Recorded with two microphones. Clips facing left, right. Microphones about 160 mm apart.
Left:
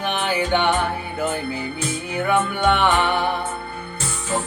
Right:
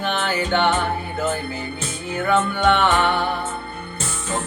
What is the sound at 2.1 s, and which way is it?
Music, 15° left (ahead or behind).